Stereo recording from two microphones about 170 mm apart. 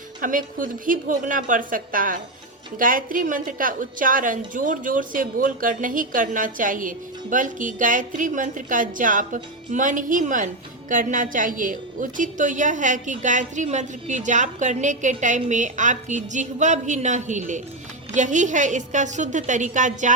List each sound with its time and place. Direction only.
0.2 s a woman's voice: 50° right (ahead or behind)